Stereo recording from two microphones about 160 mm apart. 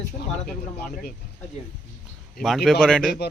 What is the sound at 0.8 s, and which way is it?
Speech, 75° left (ahead or behind).